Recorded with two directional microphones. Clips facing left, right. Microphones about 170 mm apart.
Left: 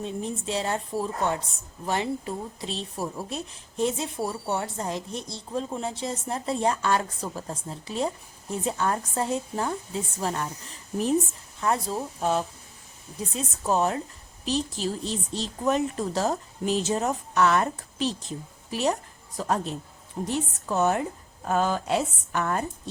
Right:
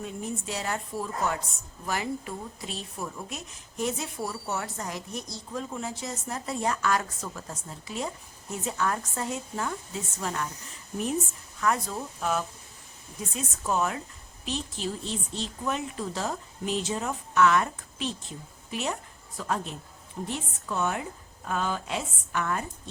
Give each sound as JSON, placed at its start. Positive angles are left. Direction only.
{"t": 0.0, "sound": "a woman's voice", "side_deg": 30}
{"t": 20.2, "sound": "a woman's voice", "side_deg": 40}